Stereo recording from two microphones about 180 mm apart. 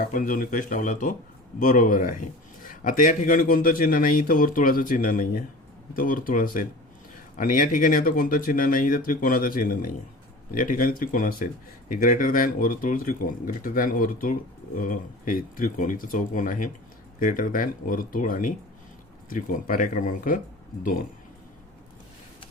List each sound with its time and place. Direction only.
0.0 s a man's voice: 50° left (ahead or behind)